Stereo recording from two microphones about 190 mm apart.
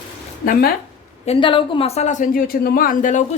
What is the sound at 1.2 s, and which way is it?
Speech, 30° left (ahead or behind).